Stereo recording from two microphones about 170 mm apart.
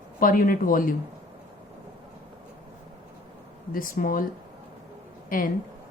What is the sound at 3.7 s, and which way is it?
Speech, 55° left (ahead or behind).